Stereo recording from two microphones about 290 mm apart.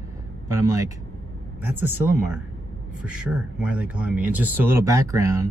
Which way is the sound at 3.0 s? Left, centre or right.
Centre.